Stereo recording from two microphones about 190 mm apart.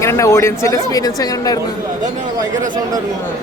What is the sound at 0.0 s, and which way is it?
Speech, 15° left (ahead or behind).